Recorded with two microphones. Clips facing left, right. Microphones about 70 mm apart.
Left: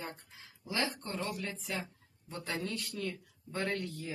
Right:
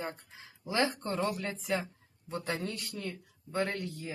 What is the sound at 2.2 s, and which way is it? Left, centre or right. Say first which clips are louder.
Speech: right 3 dB; right.